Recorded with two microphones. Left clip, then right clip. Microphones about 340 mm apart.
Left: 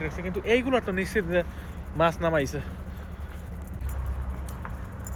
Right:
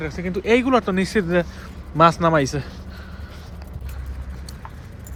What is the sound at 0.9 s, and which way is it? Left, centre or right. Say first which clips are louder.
Speech: right 5 dB; centre.